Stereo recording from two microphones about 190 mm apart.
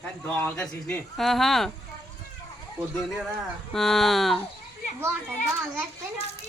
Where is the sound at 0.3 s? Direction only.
10° left (ahead or behind).